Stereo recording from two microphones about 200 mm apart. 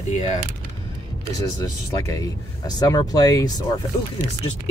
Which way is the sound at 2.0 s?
15° left (ahead or behind).